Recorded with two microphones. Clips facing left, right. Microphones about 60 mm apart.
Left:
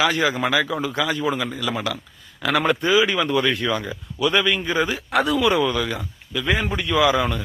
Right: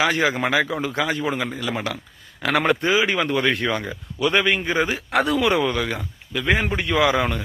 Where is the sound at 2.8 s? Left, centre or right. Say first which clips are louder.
Left 1 dB; right.